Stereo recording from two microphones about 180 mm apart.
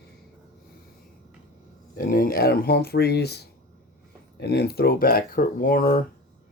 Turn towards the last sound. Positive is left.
turn(degrees=50)  # may be behind; listen again after turning